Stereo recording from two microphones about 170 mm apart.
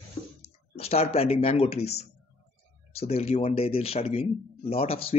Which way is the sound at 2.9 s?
40° left (ahead or behind).